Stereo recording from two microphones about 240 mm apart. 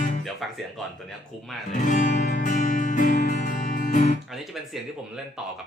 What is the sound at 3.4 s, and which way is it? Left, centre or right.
Guitar, left.